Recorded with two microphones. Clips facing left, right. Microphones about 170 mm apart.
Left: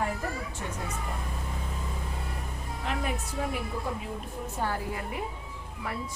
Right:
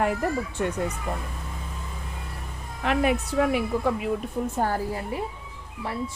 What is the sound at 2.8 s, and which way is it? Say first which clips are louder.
Speech: right 10 dB; 75° right (ahead or behind).